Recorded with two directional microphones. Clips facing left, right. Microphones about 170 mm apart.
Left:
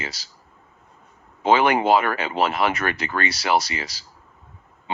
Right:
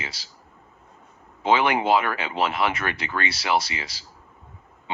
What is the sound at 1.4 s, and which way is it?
Speech, 45° left (ahead or behind).